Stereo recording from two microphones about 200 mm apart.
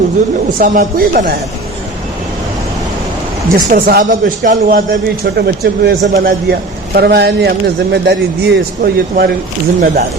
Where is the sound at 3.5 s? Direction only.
45° right (ahead or behind).